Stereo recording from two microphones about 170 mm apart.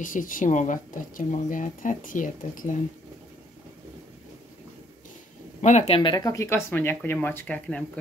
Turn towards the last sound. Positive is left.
turn(degrees=10)  # may be behind; listen again after turning